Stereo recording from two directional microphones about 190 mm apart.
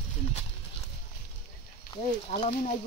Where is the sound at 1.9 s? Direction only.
25° left (ahead or behind).